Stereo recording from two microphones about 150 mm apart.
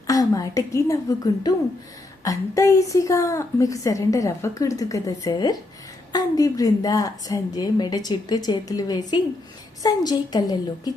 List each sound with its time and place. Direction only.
0.1 s a woman's voice: 25° left (ahead or behind)